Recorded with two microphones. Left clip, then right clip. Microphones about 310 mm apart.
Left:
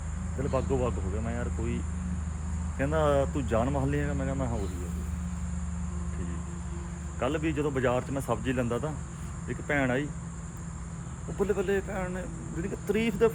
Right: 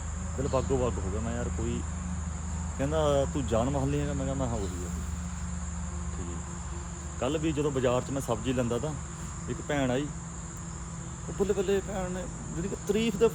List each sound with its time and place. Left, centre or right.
0.5 s speech: centre
7.2 s speech: centre
11.3 s speech: centre